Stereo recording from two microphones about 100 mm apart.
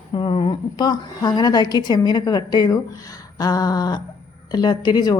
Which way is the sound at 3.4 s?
40° left (ahead or behind).